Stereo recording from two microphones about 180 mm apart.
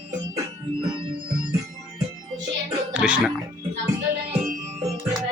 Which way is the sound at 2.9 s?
5° right (ahead or behind).